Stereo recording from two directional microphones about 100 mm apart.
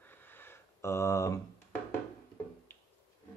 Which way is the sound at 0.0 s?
20° left (ahead or behind).